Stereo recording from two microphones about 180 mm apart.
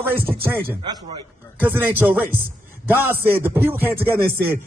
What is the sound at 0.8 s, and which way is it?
Speech, 25° right (ahead or behind).